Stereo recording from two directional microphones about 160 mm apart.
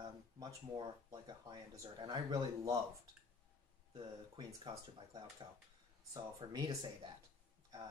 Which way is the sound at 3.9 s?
30° right (ahead or behind).